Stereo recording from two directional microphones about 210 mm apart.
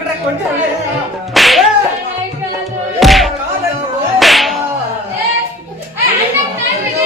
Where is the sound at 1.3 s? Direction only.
Centre (ahead or behind).